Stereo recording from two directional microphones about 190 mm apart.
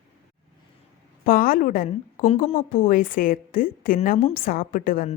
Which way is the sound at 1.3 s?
50° left (ahead or behind).